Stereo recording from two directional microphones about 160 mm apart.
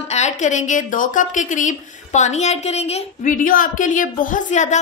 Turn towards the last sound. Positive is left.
turn(degrees=50)  # may be behind; listen again after turning